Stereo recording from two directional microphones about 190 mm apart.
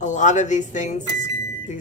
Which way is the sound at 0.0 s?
40° left (ahead or behind).